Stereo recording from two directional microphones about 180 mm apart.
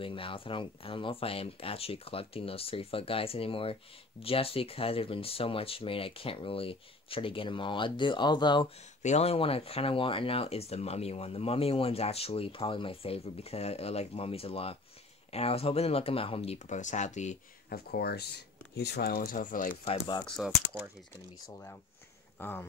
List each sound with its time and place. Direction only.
0.0 s speech: 30° left (ahead or behind)
9.0 s speech: 40° left (ahead or behind)
17.7 s speech: 60° left (ahead or behind)
19.9 s speech: 25° left (ahead or behind)
20.2 s speech: centre (ahead or behind)
21.5 s speech: 15° left (ahead or behind)